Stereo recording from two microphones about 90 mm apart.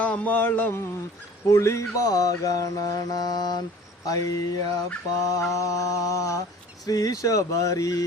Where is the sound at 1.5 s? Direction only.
35° left (ahead or behind).